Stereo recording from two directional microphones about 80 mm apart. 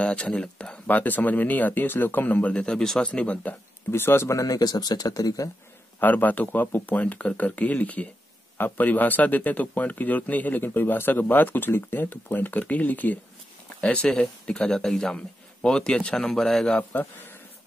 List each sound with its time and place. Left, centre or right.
0.0 s a man's voice: centre
0.8 s speech: left
3.9 s speech: left
5.9 s a man's voice: left; by 16.8 s centre
16.9 s speech: left